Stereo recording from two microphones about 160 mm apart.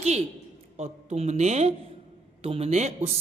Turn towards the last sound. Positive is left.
turn(degrees=-40)  # may be behind; listen again after turning